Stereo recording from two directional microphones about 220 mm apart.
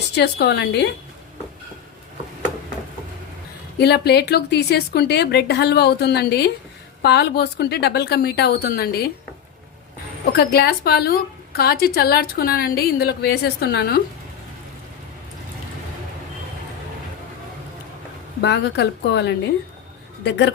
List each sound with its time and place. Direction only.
0.2 s a woman's voice: 50° left (ahead or behind)
3.8 s a woman's voice: 45° left (ahead or behind)
10.3 s a woman's voice: 45° left (ahead or behind)
18.4 s a woman's voice: 50° left (ahead or behind)